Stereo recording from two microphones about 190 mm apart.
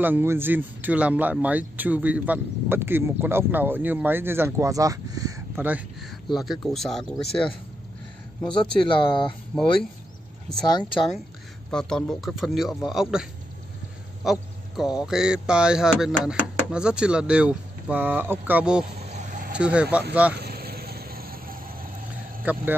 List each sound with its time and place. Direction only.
0.0 s a man's voice: 10° right (ahead or behind)
8.9 s speech: 25° left (ahead or behind)
9.5 s speech: centre (ahead or behind)
10.7 s speech: 25° left (ahead or behind)
11.7 s speech: 5° left (ahead or behind)
19.1 s vehicle: 40° right (ahead or behind)
19.5 s speech: 5° right (ahead or behind)
20.3 s vehicle: 55° right (ahead or behind)
22.4 s speech: 10° right (ahead or behind)